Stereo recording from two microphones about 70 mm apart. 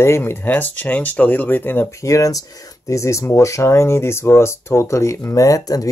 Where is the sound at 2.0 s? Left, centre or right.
Left.